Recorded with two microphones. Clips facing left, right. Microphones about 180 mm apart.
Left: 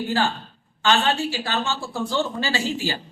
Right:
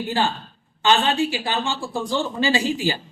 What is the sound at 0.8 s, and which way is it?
Speech, 15° right (ahead or behind).